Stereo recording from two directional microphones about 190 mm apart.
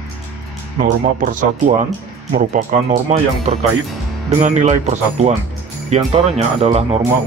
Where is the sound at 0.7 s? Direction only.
45° right (ahead or behind).